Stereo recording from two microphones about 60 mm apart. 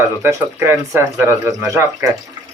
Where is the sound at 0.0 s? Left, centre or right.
Right.